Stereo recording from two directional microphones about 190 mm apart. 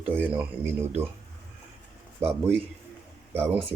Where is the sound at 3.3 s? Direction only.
10° right (ahead or behind).